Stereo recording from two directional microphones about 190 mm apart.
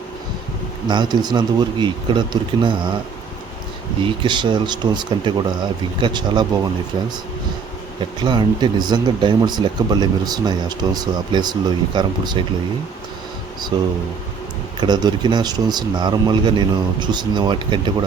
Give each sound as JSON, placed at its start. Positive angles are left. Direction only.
{"t": 0.9, "sound": "speech", "side_deg": -25}
{"t": 4.0, "sound": "speech", "side_deg": -25}
{"t": 8.2, "sound": "speech", "side_deg": -25}
{"t": 13.7, "sound": "speech", "side_deg": -25}